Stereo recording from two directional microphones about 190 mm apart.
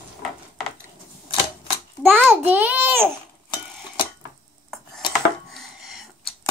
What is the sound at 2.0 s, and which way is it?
Speech, centre (ahead or behind).